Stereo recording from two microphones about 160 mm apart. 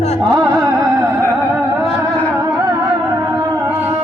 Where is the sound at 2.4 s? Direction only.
20° right (ahead or behind).